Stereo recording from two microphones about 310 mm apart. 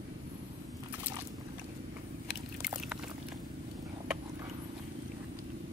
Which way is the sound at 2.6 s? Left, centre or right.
Centre.